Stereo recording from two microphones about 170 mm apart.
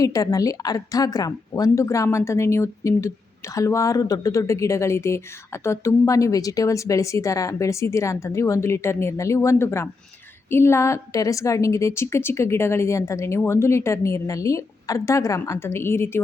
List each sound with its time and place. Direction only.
0.0 s a woman's voice: 20° left (ahead or behind)